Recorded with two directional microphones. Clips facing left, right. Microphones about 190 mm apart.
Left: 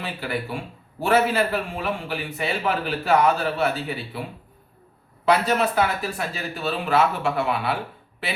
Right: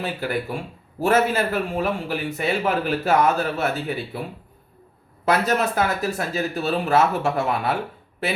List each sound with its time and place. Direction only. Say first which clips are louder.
0.0 s a man's voice: right 3 dB; 45° right (ahead or behind)
5.2 s a man's voice: even; 45° right (ahead or behind)